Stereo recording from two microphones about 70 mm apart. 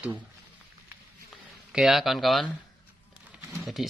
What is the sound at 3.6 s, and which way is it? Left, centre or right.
Speech, centre.